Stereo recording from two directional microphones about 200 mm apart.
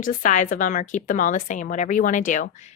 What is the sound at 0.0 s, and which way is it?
A woman's voice, 40° left (ahead or behind).